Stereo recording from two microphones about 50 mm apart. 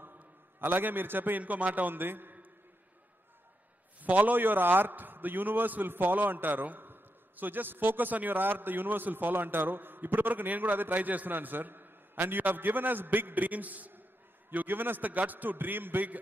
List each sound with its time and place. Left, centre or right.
0.0 s a man's voice: right
4.0 s a man's voice: right
4.4 s a man's voice: right